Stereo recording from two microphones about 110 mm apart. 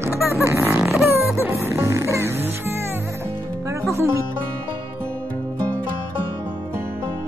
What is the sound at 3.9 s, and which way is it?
Music, 25° right (ahead or behind).